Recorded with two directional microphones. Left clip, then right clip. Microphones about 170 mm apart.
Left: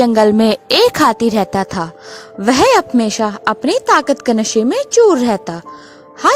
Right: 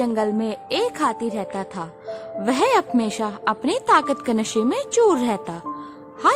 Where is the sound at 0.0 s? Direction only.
60° left (ahead or behind).